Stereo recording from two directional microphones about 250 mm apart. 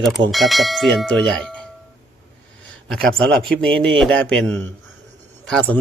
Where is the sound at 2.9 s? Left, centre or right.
Centre.